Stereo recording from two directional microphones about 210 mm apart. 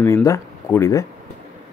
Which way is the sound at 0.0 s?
15° left (ahead or behind).